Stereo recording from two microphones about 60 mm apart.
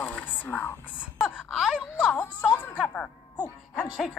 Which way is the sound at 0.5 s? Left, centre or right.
Left.